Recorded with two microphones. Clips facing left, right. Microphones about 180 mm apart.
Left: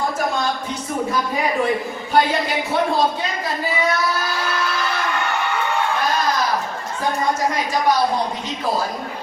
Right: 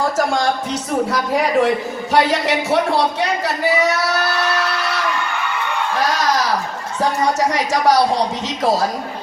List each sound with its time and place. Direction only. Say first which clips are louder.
0.0 s a man's voice: right 4 dB; 85° right
6.1 s a sound: right 2 dB; 85° right
7.0 s a woman's voice: right 3 dB; 75° right (ahead or behind)